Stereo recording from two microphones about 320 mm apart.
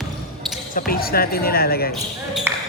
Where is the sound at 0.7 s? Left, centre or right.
Left.